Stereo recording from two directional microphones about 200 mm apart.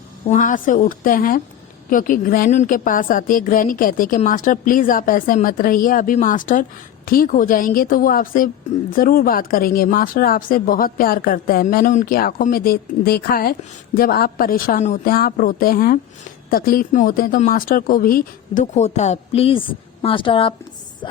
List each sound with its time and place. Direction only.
0.3 s speech: 40° left (ahead or behind)